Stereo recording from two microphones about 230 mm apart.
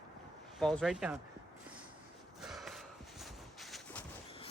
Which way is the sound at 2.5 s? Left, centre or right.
Centre.